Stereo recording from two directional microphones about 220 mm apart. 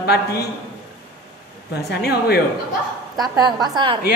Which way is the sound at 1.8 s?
45° left (ahead or behind).